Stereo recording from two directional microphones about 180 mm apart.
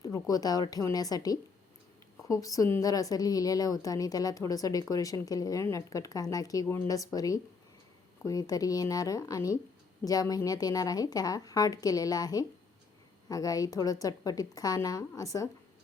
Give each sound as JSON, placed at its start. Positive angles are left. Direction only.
{"t": 0.0, "sound": "a woman's voice", "side_deg": 20}